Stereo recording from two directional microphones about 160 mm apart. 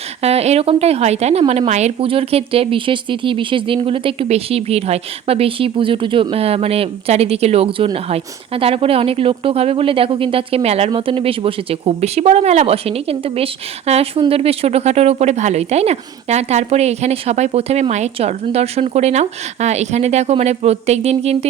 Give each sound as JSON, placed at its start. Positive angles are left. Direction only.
{"t": 0.2, "sound": "speech", "side_deg": -40}